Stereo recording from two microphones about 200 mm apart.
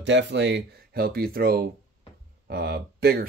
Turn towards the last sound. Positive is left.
turn(degrees=-55)  # may be behind; listen again after turning